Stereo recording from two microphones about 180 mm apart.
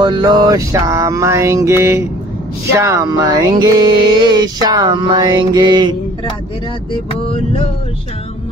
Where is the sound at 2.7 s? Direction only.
15° right (ahead or behind).